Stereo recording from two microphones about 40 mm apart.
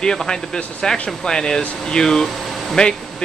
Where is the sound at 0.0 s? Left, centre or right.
Centre.